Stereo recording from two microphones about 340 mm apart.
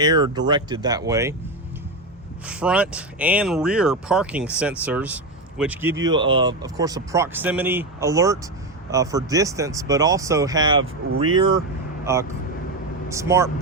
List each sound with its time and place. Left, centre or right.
0.0 s speech: centre
2.5 s speech: centre
11.1 s speech: right
11.3 s speech: centre